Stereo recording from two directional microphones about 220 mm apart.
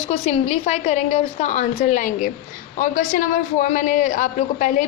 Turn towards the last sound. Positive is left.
turn(degrees=35)  # may be behind; listen again after turning